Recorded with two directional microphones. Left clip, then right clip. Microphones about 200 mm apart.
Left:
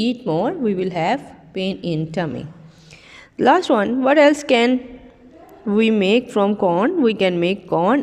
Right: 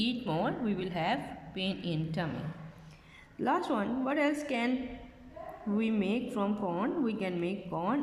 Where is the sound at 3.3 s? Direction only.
45° left (ahead or behind).